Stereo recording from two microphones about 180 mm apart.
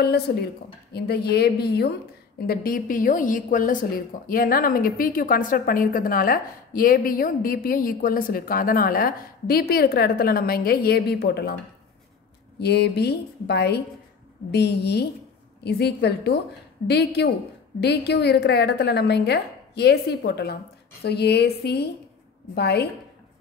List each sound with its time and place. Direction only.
0.0 s a woman's voice: 65° left (ahead or behind)
12.5 s a woman's voice: 65° left (ahead or behind)